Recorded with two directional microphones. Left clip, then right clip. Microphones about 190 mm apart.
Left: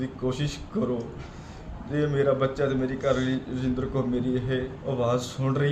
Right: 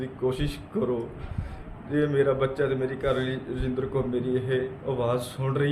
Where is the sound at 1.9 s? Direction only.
10° right (ahead or behind).